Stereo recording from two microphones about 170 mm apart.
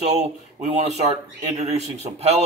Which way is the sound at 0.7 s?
40° right (ahead or behind).